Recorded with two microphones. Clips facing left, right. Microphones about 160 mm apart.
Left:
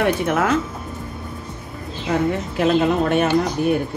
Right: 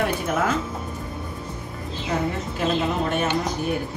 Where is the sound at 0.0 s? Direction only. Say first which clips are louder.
Left 4 dB; 75° left (ahead or behind).